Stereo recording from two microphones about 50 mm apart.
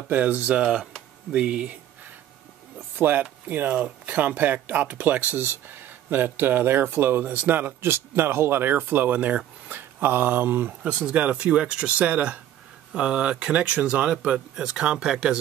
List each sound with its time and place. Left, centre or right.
0.1 s speech: right
3.0 s speech: right
5.4 s speech: right
10.8 s speech: right